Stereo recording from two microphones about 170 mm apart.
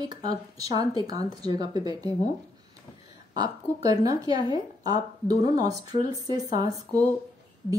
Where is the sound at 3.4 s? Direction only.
20° right (ahead or behind).